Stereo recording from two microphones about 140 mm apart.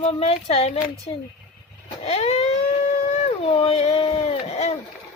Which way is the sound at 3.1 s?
45° left (ahead or behind).